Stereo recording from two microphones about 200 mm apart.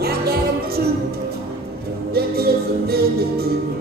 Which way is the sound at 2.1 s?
50° right (ahead or behind).